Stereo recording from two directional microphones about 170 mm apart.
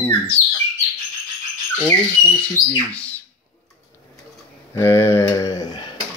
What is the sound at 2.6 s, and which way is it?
Speech, 50° left (ahead or behind).